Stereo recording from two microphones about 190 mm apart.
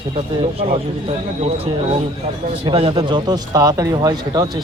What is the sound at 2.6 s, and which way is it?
Speech, 30° right (ahead or behind).